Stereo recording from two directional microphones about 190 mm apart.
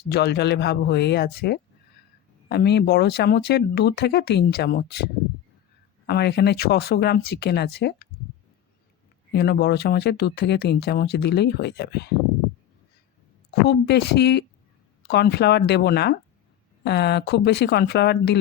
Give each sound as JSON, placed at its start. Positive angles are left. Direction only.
{"t": 0.1, "sound": "speech", "side_deg": 60}
{"t": 6.1, "sound": "speech", "side_deg": 60}
{"t": 9.3, "sound": "speech", "side_deg": 60}
{"t": 13.5, "sound": "speech", "side_deg": 60}